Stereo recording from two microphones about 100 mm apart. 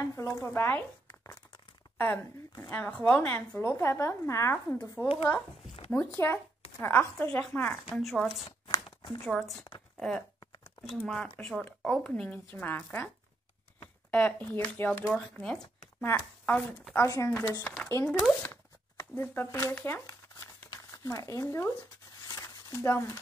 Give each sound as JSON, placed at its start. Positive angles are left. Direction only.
{"t": 0.0, "sound": "a woman's voice", "side_deg": 30}
{"t": 7.9, "sound": "speech", "side_deg": 5}
{"t": 8.8, "sound": "a sound", "side_deg": 50}
{"t": 9.3, "sound": "speech", "side_deg": 0}
{"t": 14.1, "sound": "a woman's voice", "side_deg": 15}
{"t": 15.3, "sound": "speech", "side_deg": 5}
{"t": 16.9, "sound": "a woman's voice", "side_deg": 30}
{"t": 18.4, "sound": "a sound", "side_deg": 20}
{"t": 19.4, "sound": "speech", "side_deg": 30}
{"t": 19.7, "sound": "crumpling", "side_deg": 25}
{"t": 20.7, "sound": "speech", "side_deg": 35}
{"t": 22.3, "sound": "a sound", "side_deg": 35}